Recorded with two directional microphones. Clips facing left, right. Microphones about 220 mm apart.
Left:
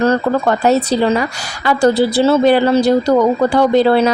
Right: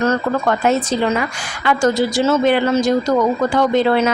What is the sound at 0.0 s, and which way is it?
A woman's voice, 35° left (ahead or behind).